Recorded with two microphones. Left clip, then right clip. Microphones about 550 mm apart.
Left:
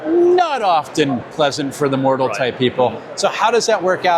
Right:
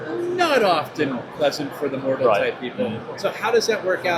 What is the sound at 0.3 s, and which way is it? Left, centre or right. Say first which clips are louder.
Speech: left 3 dB; left.